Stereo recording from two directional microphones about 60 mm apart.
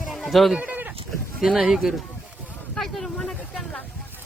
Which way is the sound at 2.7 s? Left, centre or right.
Centre.